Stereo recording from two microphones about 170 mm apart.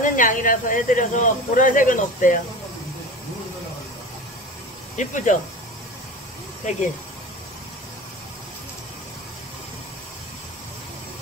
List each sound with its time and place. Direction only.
0.0 s speech: 50° left (ahead or behind)
4.9 s speech: 45° left (ahead or behind)